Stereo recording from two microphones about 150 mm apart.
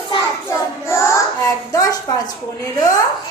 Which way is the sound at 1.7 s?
25° left (ahead or behind).